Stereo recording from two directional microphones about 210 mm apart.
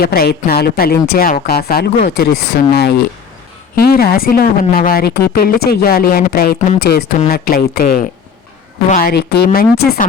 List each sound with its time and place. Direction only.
0.0 s speech: 45° left (ahead or behind)